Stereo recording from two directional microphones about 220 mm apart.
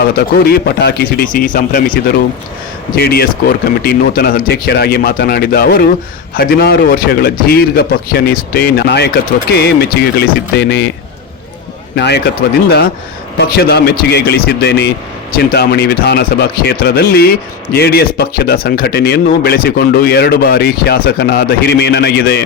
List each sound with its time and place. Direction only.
0.2 s speech: 45° left (ahead or behind)
11.9 s speech: 50° left (ahead or behind)